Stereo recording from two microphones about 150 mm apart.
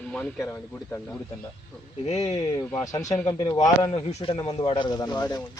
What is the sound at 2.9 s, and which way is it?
Speech, 25° left (ahead or behind).